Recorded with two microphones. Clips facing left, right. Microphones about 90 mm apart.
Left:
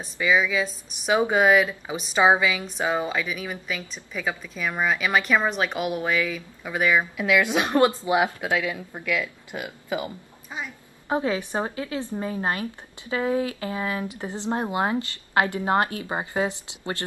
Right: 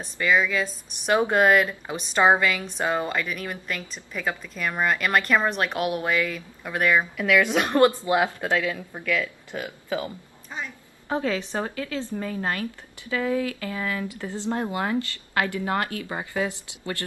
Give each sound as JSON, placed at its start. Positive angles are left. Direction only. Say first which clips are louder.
{"t": 0.0, "sound": "speech", "louder": "even", "side_deg": 5}
{"t": 7.2, "sound": "speech", "louder": "right 1 dB", "side_deg": 15}